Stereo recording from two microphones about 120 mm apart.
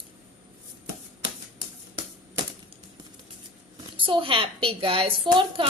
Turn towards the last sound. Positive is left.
turn(degrees=-45)  # may be behind; listen again after turning